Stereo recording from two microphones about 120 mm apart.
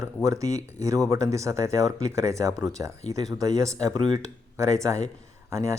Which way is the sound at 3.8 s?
35° right (ahead or behind).